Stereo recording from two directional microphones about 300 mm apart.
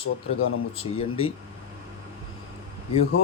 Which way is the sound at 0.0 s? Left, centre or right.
Left.